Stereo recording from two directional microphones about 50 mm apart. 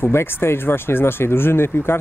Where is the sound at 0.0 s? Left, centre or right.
Left.